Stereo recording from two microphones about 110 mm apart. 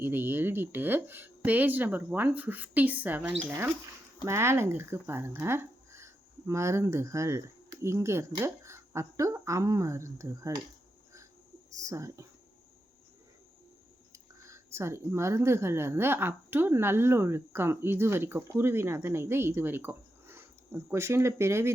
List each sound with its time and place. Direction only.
0.0 s speech: 20° right (ahead or behind)
4.3 s speech: 25° right (ahead or behind)
11.8 s speech: 30° right (ahead or behind)
14.1 s speech: 25° right (ahead or behind)